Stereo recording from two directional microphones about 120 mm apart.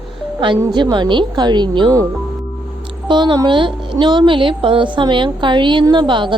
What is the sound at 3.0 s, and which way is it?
A woman's voice, 40° right (ahead or behind).